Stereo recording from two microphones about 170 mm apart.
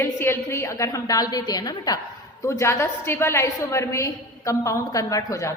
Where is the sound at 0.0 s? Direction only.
15° left (ahead or behind).